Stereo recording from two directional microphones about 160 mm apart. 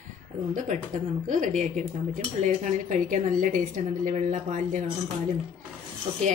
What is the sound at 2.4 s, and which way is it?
A woman's voice, 50° right (ahead or behind).